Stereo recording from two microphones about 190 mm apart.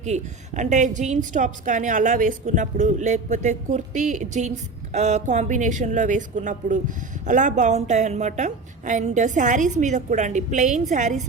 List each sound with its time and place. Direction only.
0.0 s a woman's voice: 40° right (ahead or behind)